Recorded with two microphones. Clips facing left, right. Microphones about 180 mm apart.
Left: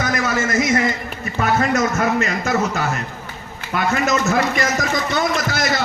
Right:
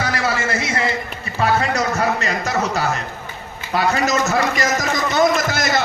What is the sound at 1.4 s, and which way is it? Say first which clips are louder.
A man's voice: left 1 dB; 35° right (ahead or behind).